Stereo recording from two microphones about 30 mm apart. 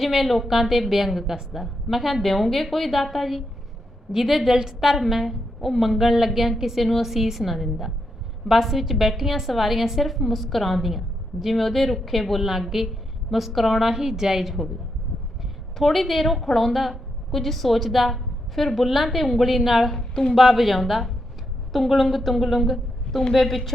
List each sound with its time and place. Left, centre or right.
0.0 s a woman's voice: centre
2.3 s a woman's voice: centre
12.4 s a woman's voice: centre
13.8 s a woman's voice: centre
15.8 s a woman's voice: centre
20.0 s a woman's voice: centre
20.8 s a woman's voice: centre